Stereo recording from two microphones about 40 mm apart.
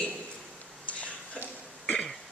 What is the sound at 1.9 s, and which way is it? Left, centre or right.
Throat clearing, centre.